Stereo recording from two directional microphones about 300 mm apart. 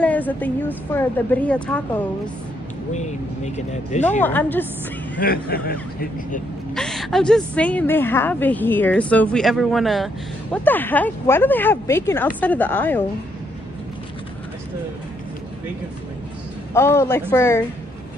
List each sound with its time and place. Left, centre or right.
0.0 s a woman's voice: centre
2.9 s speech: left
4.2 s a woman's voice: centre
5.1 s speech: left
6.7 s a woman's voice: centre
16.7 s a woman's voice: centre